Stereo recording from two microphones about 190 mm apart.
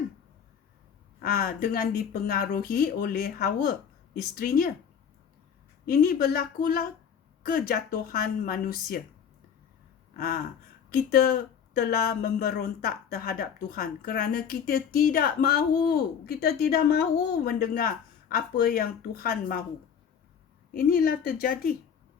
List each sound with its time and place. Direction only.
1.2 s a woman's voice: 50° left (ahead or behind)
5.8 s a woman's voice: 50° left (ahead or behind)
10.2 s a woman's voice: 50° left (ahead or behind)
20.7 s a woman's voice: 50° left (ahead or behind)